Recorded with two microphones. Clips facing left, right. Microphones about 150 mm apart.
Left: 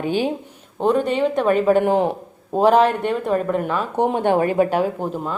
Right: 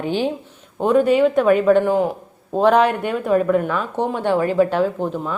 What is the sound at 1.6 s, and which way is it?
Speech, 10° left (ahead or behind).